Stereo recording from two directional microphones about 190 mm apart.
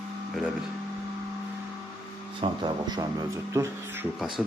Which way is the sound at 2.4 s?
25° right (ahead or behind).